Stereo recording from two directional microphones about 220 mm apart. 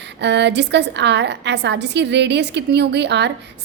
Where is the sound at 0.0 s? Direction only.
50° right (ahead or behind).